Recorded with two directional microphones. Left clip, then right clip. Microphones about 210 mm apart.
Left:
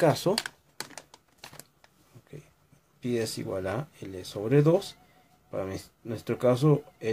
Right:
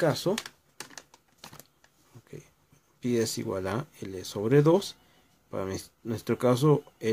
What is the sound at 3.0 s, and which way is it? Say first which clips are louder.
Speech: right 2 dB; 30° right (ahead or behind).